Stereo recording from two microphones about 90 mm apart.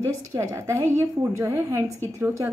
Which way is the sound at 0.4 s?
30° right (ahead or behind).